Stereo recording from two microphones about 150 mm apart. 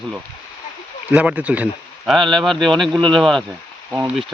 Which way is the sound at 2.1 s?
Centre (ahead or behind).